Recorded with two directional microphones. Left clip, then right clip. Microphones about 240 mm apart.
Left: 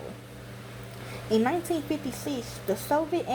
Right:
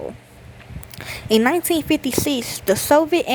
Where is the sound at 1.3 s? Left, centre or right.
Right.